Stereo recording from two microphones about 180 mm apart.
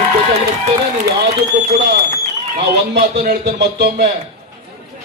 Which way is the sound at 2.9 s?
70° right (ahead or behind).